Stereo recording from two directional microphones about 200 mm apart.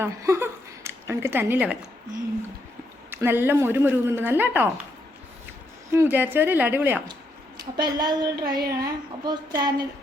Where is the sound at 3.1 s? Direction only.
10° right (ahead or behind).